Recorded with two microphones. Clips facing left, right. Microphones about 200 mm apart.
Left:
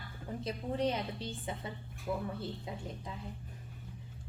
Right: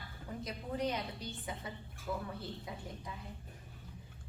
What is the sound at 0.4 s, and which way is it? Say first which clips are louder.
A woman's voice: left 4 dB; 30° left (ahead or behind).